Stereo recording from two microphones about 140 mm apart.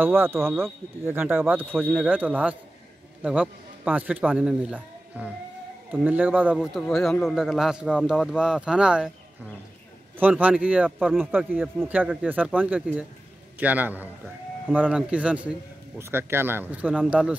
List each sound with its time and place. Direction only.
0.0 s speech: 15° right (ahead or behind)
1.7 s speech: 5° left (ahead or behind)
2.0 s a man's voice: 10° right (ahead or behind)
10.4 s speech: 10° right (ahead or behind)